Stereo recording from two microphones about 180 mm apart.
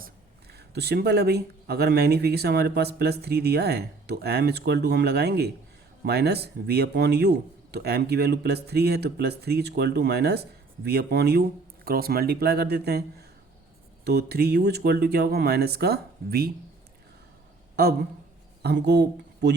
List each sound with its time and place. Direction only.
0.5 s speech: 65° right (ahead or behind)
18.6 s speech: 65° right (ahead or behind)